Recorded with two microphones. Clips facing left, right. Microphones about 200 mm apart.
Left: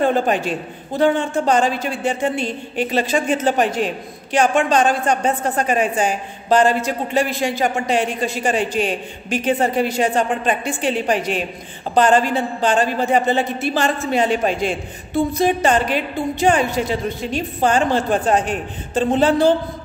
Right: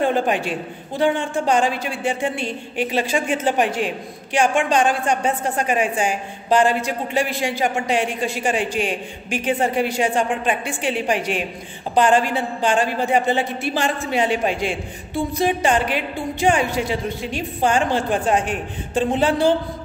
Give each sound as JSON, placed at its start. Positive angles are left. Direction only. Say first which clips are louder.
{"t": 0.0, "sound": "a man's voice", "louder": "left 2 dB", "side_deg": -10}